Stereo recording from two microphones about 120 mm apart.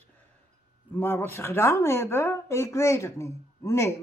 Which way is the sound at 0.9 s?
20° left (ahead or behind).